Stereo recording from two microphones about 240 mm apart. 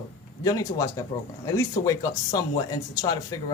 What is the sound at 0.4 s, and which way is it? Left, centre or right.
Speech, centre.